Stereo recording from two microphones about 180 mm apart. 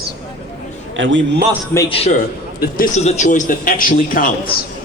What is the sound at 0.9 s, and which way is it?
Speech, 90° right.